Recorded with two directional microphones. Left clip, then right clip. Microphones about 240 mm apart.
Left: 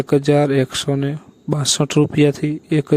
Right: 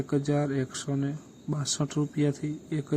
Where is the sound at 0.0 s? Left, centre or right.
Left.